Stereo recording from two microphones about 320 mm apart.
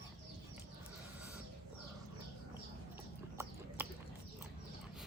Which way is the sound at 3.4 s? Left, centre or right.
Centre.